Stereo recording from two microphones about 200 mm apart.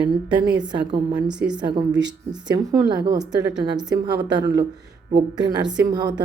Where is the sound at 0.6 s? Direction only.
25° right (ahead or behind).